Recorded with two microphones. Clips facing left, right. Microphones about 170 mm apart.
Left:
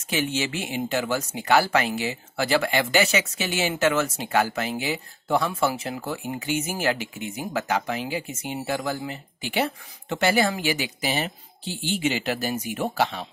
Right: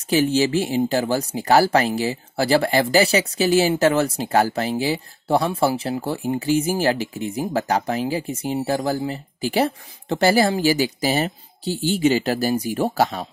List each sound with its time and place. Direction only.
0.1 s speech: 35° right (ahead or behind)